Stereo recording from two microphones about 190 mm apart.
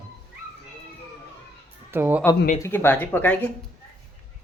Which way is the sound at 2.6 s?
10° left (ahead or behind).